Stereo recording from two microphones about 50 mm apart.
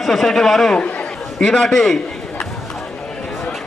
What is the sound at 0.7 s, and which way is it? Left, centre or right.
Speech, left.